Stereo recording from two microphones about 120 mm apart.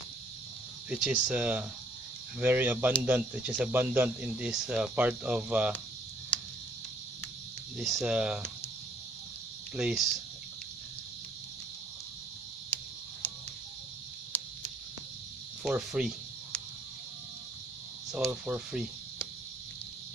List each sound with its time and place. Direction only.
0.8 s speech: 10° right (ahead or behind)
7.7 s speech: centre (ahead or behind)
9.8 s speech: 5° right (ahead or behind)
12.6 s a sound: 10° left (ahead or behind)
15.6 s speech: 5° right (ahead or behind)
18.3 s speech: 10° right (ahead or behind)